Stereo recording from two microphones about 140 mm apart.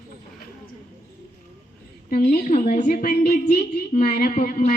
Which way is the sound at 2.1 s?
75° left (ahead or behind).